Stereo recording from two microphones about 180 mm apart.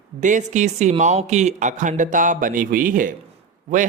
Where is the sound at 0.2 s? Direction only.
45° right (ahead or behind).